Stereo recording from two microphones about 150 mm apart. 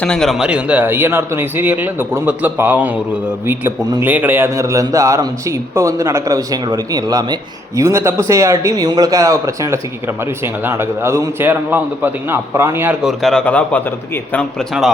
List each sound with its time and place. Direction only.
0.0 s a man's voice: 5° left (ahead or behind)